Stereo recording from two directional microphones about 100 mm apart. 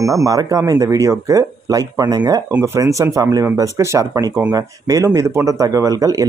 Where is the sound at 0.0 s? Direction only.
35° right (ahead or behind).